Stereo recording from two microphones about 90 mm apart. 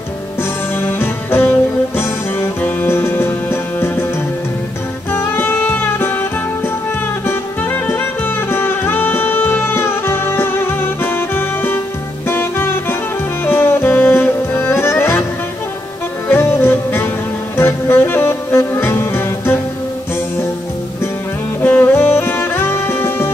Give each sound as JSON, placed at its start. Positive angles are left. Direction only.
{"t": 0.4, "sound": "music", "side_deg": 25}
{"t": 5.1, "sound": "music", "side_deg": 25}
{"t": 16.3, "sound": "music", "side_deg": 25}
{"t": 17.6, "sound": "saxophone", "side_deg": 25}
{"t": 21.6, "sound": "music", "side_deg": 20}